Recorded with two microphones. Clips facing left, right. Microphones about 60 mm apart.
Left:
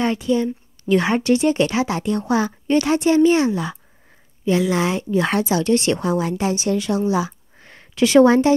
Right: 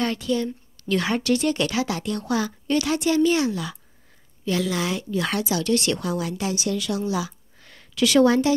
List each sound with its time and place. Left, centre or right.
0.0 s a woman's voice: left